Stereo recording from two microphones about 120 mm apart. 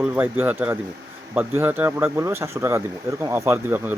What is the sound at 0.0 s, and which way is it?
Speech, 15° right (ahead or behind).